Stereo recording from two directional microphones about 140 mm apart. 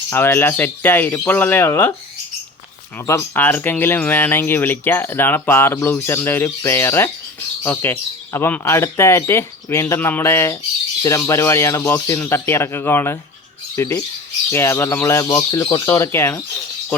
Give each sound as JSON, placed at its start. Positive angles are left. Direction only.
{"t": 0.1, "sound": "speech", "side_deg": 15}
{"t": 3.1, "sound": "speech", "side_deg": 15}